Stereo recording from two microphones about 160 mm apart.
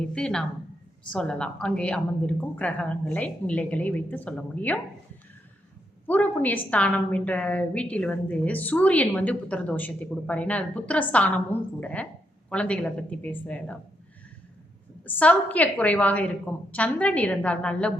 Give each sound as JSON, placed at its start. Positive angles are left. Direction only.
{"t": 0.0, "sound": "a woman's voice", "side_deg": 5}
{"t": 6.1, "sound": "a woman's voice", "side_deg": 10}
{"t": 15.0, "sound": "a woman's voice", "side_deg": 10}